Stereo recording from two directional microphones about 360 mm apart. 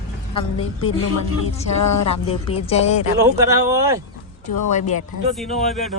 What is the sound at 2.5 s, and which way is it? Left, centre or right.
Speech, centre.